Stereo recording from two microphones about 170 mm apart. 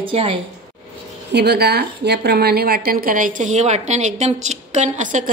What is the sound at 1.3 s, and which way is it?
A woman's voice, 75° right (ahead or behind).